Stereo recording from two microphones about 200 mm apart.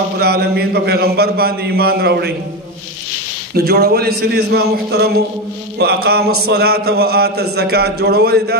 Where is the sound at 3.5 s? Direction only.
55° right (ahead or behind).